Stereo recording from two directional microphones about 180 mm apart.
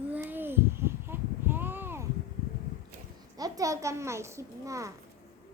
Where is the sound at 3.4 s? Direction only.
20° right (ahead or behind).